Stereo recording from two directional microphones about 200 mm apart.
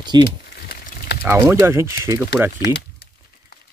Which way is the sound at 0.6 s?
50° left (ahead or behind).